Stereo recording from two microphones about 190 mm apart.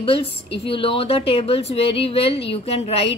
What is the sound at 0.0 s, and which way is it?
A woman's voice, 30° left (ahead or behind).